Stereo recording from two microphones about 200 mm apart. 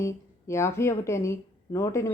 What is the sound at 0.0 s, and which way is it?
A woman's voice, 15° left (ahead or behind).